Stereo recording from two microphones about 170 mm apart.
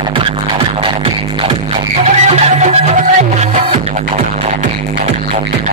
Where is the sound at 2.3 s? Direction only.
40° right (ahead or behind).